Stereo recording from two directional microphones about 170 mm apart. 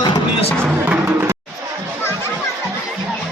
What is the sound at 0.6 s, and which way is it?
Music, 15° right (ahead or behind).